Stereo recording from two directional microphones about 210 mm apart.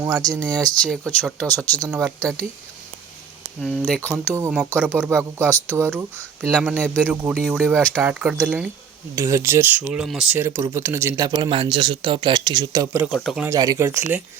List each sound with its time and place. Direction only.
0.0 s speech: 20° right (ahead or behind)
0.3 s speech: 5° left (ahead or behind)
1.9 s speech: 5° right (ahead or behind)
3.6 s speech: centre (ahead or behind)
4.4 s speech: 10° right (ahead or behind)
6.1 s speech: centre (ahead or behind); by 13.1 s 15° right (ahead or behind)
13.1 s speech: centre (ahead or behind)
13.5 s speech: 15° right (ahead or behind)